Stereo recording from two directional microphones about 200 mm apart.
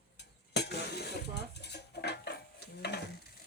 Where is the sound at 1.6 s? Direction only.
55° left (ahead or behind).